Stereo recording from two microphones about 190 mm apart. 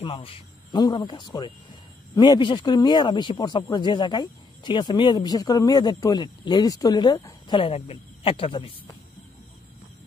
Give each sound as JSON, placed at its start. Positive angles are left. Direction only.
{"t": 0.0, "sound": "speech", "side_deg": 30}